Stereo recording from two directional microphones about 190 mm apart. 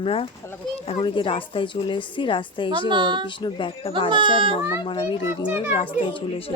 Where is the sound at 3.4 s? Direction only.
25° left (ahead or behind).